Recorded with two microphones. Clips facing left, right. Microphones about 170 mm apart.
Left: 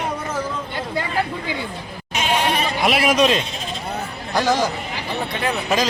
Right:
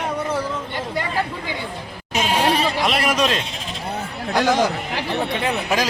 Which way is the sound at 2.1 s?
35° right (ahead or behind).